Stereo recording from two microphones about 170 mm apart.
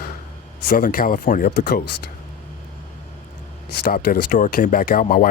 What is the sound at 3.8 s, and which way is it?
Speech, 55° left (ahead or behind).